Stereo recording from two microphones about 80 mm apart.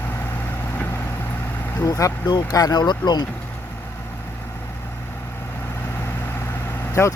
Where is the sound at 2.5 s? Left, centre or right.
Left.